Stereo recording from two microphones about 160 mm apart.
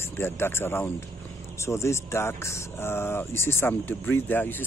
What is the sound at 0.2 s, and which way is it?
Speech, 15° left (ahead or behind).